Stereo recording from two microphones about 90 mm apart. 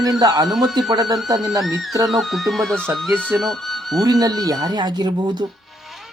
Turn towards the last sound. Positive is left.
turn(degrees=-55)  # may be behind; listen again after turning